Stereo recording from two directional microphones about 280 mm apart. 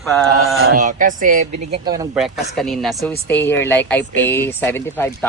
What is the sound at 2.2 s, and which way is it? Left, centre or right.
Speech, centre.